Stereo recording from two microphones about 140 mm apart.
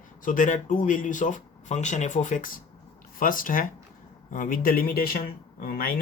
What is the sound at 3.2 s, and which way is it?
Speech, 75° left (ahead or behind).